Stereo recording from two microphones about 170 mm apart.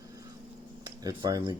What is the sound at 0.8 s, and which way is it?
Speech, 25° right (ahead or behind).